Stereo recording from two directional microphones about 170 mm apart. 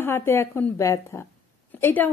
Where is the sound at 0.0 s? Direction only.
15° left (ahead or behind).